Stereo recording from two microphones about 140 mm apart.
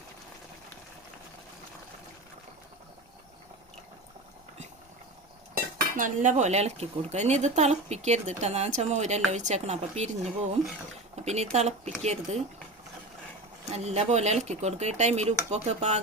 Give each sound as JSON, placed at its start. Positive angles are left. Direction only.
{"t": 5.7, "sound": "dishes", "side_deg": -70}
{"t": 11.5, "sound": "speech", "side_deg": -50}
{"t": 13.7, "sound": "speech", "side_deg": -50}